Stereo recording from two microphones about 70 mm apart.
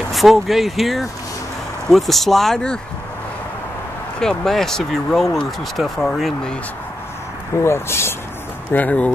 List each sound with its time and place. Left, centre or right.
0.1 s speech: centre
4.2 s speech: centre
7.6 s speech: left
8.7 s speech: left